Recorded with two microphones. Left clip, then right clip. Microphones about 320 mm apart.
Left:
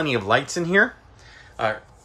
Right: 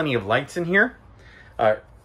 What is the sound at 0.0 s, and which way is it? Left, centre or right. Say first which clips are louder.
Speech: left 1 dB; centre.